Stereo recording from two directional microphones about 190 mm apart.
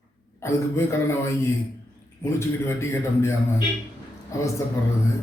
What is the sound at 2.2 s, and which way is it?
Speech, 15° left (ahead or behind).